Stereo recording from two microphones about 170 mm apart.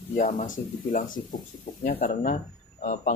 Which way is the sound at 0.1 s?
45° left (ahead or behind).